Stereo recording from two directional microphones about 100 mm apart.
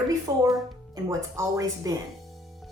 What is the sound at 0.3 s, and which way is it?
A woman's voice, 30° right (ahead or behind).